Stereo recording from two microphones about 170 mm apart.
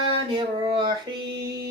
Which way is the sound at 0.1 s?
30° right (ahead or behind).